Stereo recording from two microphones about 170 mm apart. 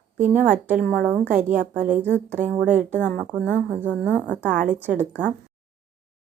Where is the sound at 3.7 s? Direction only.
10° right (ahead or behind).